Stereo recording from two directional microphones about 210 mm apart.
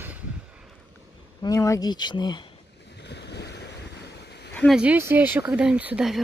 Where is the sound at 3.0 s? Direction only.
55° left (ahead or behind).